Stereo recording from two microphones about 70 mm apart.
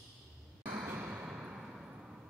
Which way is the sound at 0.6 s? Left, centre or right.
Right.